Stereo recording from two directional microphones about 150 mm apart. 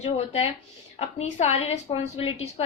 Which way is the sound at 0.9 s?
45° left (ahead or behind).